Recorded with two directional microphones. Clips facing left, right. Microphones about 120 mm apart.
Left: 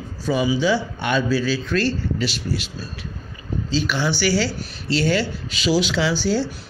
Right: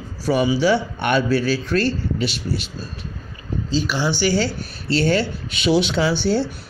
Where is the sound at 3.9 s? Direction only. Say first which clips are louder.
Right 1 dB; 15° right (ahead or behind).